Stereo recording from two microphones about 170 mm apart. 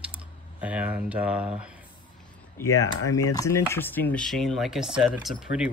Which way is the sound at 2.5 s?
20° left (ahead or behind).